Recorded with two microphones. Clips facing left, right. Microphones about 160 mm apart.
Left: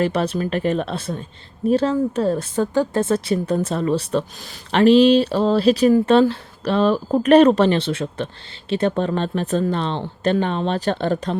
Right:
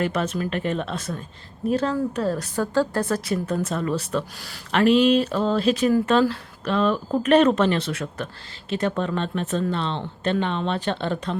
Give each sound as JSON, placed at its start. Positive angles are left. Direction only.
{"t": 0.0, "sound": "speech", "side_deg": 30}